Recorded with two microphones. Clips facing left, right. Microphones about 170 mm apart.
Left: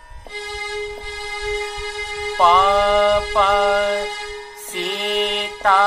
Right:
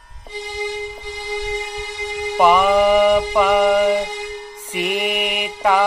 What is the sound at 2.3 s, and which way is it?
Speech, 10° right (ahead or behind).